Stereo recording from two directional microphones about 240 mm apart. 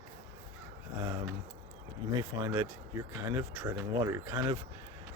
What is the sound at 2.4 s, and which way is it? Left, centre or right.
Speech, centre.